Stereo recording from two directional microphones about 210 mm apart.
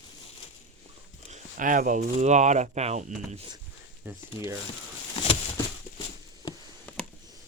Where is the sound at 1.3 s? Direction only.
40° right (ahead or behind).